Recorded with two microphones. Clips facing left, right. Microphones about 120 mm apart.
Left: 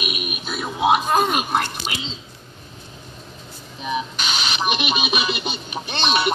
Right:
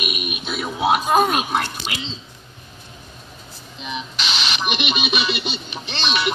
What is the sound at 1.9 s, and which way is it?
Speech, 25° left (ahead or behind).